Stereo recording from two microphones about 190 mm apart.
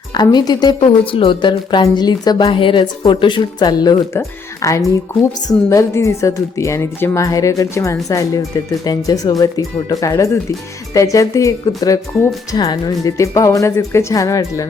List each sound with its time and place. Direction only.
0.1 s a woman's voice: 20° left (ahead or behind)